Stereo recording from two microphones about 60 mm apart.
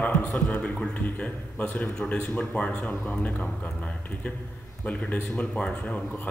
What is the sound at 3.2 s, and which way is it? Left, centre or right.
A man's voice, left.